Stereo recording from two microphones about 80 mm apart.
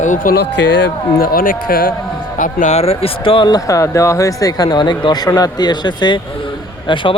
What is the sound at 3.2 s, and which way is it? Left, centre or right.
Speech, left.